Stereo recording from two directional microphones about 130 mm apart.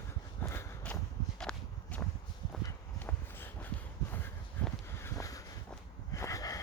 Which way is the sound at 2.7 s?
15° left (ahead or behind).